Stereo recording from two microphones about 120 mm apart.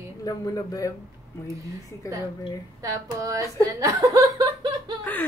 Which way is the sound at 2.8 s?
25° right (ahead or behind).